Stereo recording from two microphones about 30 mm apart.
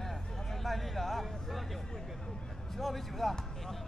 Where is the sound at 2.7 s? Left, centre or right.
Centre.